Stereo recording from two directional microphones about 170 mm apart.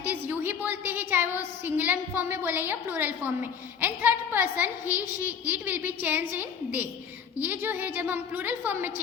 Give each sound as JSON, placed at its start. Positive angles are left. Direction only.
{"t": 0.0, "sound": "a woman's voice", "side_deg": -10}